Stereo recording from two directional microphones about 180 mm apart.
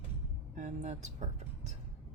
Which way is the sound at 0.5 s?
40° right (ahead or behind).